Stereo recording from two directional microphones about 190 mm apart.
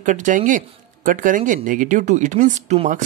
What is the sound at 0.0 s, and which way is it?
Speech, 40° right (ahead or behind).